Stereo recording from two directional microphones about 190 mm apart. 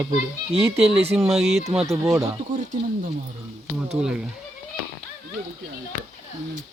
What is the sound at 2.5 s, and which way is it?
Speech, 45° right (ahead or behind).